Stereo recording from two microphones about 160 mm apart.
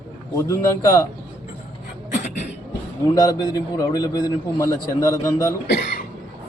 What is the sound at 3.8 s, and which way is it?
A man's voice, 25° left (ahead or behind).